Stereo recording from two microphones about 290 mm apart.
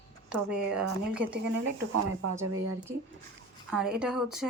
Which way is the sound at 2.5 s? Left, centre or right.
Right.